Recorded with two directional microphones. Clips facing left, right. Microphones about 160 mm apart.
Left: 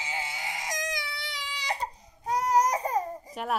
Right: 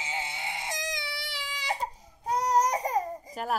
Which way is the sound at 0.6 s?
30° right (ahead or behind).